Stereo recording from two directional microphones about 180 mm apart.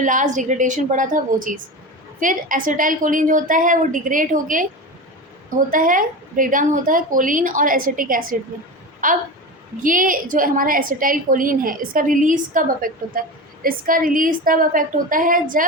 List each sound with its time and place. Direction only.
0.0 s a woman's voice: 45° right (ahead or behind)